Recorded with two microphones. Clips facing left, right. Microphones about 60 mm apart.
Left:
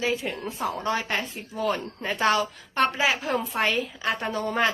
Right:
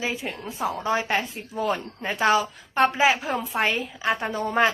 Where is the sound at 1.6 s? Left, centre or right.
Centre.